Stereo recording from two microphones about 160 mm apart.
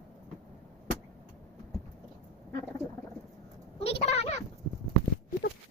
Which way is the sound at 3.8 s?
40° left (ahead or behind).